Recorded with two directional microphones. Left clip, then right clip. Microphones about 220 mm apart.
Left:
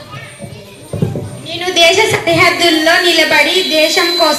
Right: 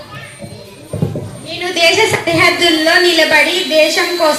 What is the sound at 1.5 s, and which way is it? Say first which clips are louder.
A woman's voice: left 2 dB; 30° left (ahead or behind).